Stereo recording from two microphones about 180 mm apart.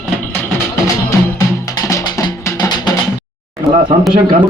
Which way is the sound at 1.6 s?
20° left (ahead or behind).